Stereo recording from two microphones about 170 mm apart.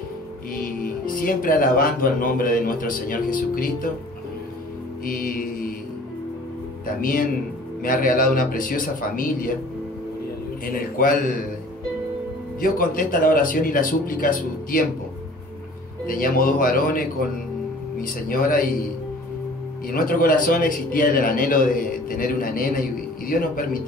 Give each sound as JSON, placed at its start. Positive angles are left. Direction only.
{"t": 0.6, "sound": "speech", "side_deg": 55}
{"t": 5.0, "sound": "speech", "side_deg": 55}
{"t": 7.0, "sound": "speech", "side_deg": 55}
{"t": 10.6, "sound": "speech", "side_deg": 60}
{"t": 12.5, "sound": "speech", "side_deg": 55}
{"t": 16.1, "sound": "speech", "side_deg": 55}
{"t": 18.0, "sound": "speech", "side_deg": 55}
{"t": 19.9, "sound": "speech", "side_deg": 55}